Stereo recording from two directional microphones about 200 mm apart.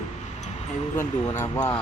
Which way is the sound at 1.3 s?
10° left (ahead or behind).